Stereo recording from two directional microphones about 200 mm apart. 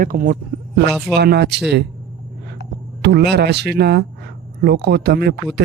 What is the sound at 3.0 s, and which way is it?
Speech, 55° right (ahead or behind).